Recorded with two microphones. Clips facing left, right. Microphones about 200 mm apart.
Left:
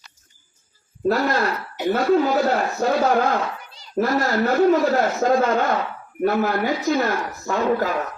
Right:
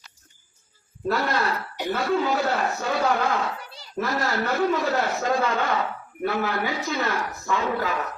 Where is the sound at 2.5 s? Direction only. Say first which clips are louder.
Left 5 dB; 40° left (ahead or behind).